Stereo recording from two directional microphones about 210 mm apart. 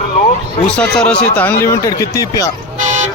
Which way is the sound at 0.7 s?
5° left (ahead or behind).